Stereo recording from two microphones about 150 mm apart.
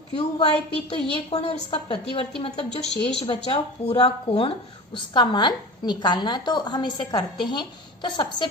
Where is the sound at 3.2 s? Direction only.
35° left (ahead or behind).